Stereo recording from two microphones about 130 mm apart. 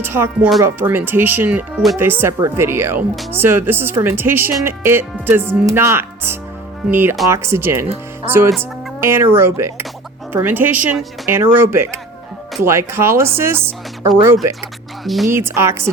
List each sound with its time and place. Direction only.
0.0 s speech: 15° right (ahead or behind)
15.0 s speech: centre (ahead or behind)
15.3 s speech: 20° right (ahead or behind)